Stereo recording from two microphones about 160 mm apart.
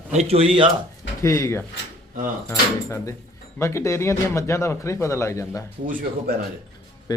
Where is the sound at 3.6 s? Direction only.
15° left (ahead or behind).